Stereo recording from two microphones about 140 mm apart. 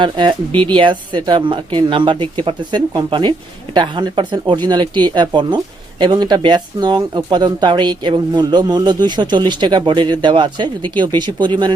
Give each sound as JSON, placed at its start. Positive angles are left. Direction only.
{"t": 0.0, "sound": "speech", "side_deg": -35}